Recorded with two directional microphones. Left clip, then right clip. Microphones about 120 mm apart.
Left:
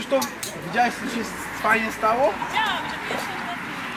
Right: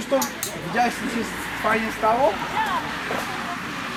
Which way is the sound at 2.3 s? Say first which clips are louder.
Even; 45° right (ahead or behind).